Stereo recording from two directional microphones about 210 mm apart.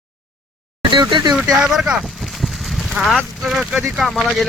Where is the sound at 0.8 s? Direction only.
20° right (ahead or behind).